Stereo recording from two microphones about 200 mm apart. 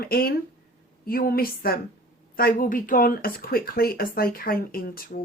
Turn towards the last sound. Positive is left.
turn(degrees=45)  # may be behind; listen again after turning